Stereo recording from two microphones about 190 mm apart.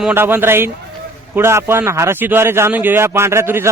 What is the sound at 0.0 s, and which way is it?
A man's voice, 10° right (ahead or behind).